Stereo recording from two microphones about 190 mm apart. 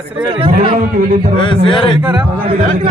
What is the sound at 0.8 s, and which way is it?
Speech, 45° right (ahead or behind).